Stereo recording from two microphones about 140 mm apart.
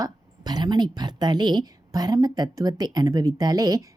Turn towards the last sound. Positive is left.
turn(degrees=-25)  # may be behind; listen again after turning